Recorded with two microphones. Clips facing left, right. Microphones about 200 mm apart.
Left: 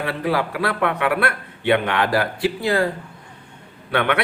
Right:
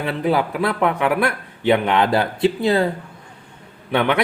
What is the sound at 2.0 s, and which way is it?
Speech, 25° right (ahead or behind).